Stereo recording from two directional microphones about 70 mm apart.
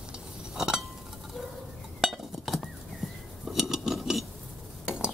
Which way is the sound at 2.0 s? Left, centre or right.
Centre.